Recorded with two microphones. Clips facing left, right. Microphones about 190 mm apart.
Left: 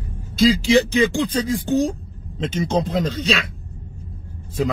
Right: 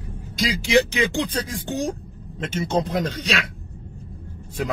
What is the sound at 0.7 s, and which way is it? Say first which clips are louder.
Speech: left 3 dB; 15° right (ahead or behind).